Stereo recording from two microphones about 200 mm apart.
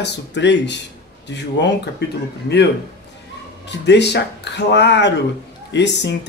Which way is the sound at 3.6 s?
60° left (ahead or behind).